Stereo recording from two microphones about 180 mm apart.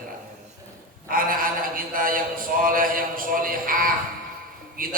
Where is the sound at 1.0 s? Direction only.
50° right (ahead or behind).